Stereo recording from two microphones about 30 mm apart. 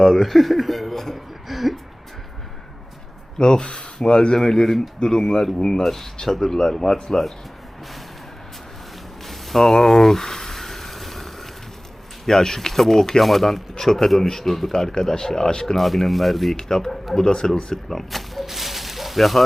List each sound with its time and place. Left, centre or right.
0.0 s speech: centre
1.5 s a sound: centre
3.3 s a man's voice: left; by 5.5 s centre
5.5 s speech: left
5.8 s a man's voice: centre
9.2 s a sound: centre
12.2 s a man's voice: centre
15.8 s speech: centre
16.6 s speech: centre
17.9 s speech: centre
18.4 s a sound: centre